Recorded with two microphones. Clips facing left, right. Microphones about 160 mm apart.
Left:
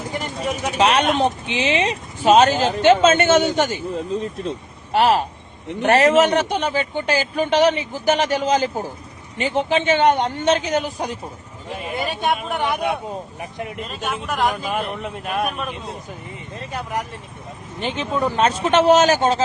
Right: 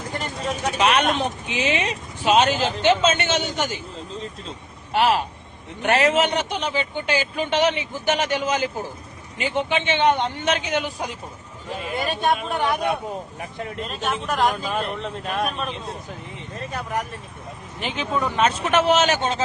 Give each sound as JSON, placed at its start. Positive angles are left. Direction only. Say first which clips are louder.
{"t": 0.1, "sound": "a sound", "louder": "left 2 dB", "side_deg": 15}
{"t": 0.8, "sound": "speech", "louder": "left 4 dB", "side_deg": 30}
{"t": 2.2, "sound": "a man's voice", "louder": "left 5 dB", "side_deg": 45}
{"t": 4.9, "sound": "speech", "louder": "left 3 dB", "side_deg": 40}
{"t": 11.9, "sound": "a man's voice", "louder": "even", "side_deg": 10}
{"t": 18.2, "sound": "speech", "louder": "left 3 dB", "side_deg": 35}